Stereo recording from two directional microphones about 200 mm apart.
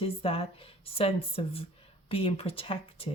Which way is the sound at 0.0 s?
30° left (ahead or behind).